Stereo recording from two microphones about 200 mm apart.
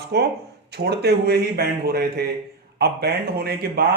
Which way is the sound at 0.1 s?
55° right (ahead or behind).